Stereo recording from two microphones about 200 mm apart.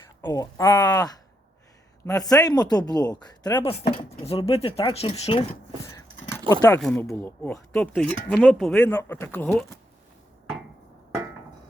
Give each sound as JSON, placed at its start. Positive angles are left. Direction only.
{"t": 0.2, "sound": "speech", "side_deg": 15}
{"t": 6.0, "sound": "a sound", "side_deg": 15}
{"t": 6.5, "sound": "speech", "side_deg": 15}